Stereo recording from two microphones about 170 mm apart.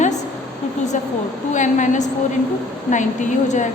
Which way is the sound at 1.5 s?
45° left (ahead or behind).